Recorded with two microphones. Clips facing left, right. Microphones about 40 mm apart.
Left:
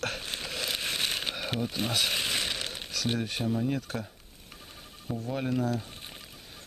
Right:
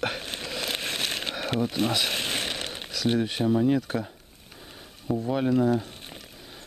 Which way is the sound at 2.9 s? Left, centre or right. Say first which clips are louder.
Right 6 dB; centre.